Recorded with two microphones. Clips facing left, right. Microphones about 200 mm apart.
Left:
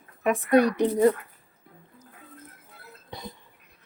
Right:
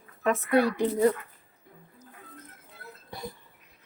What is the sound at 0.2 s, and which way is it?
Speech, 15° left (ahead or behind).